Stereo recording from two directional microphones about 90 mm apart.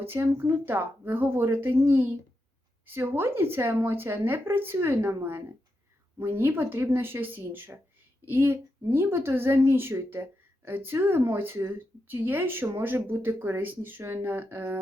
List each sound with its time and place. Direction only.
0.0 s speech: 25° right (ahead or behind)